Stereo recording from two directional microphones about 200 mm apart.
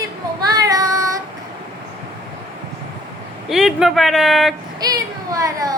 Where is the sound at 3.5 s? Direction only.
Centre (ahead or behind).